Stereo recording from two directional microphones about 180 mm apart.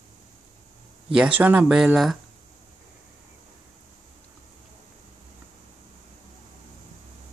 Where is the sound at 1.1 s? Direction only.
5° right (ahead or behind).